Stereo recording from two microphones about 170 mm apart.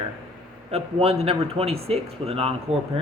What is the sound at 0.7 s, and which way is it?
Speech, 35° right (ahead or behind).